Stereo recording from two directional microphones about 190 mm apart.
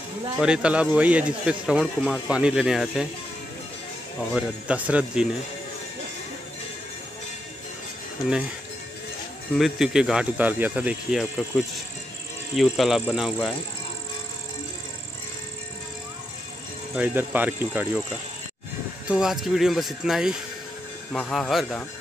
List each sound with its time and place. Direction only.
0.4 s speech: 5° right (ahead or behind)
4.3 s speech: 5° right (ahead or behind)
9.6 s speech: centre (ahead or behind)
16.9 s speech: 10° right (ahead or behind)
19.0 s speech: centre (ahead or behind)